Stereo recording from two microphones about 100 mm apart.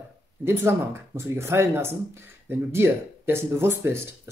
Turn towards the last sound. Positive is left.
turn(degrees=-25)  # may be behind; listen again after turning